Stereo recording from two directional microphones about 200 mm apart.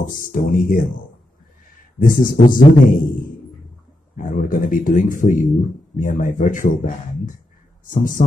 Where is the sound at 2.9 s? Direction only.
45° left (ahead or behind).